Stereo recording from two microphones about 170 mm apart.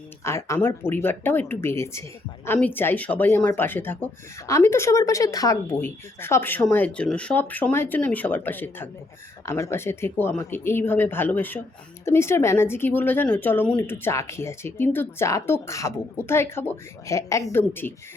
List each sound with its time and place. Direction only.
0.3 s speech: 15° left (ahead or behind)